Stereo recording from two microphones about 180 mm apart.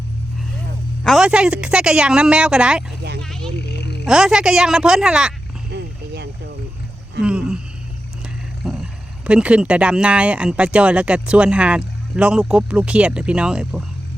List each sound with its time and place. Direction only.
1.0 s speech: centre (ahead or behind)
3.2 s a sound: 5° left (ahead or behind)
4.0 s speech: 5° right (ahead or behind)
5.7 s boat: 65° right (ahead or behind)
7.2 s speech: 5° right (ahead or behind)
8.6 s speech: centre (ahead or behind)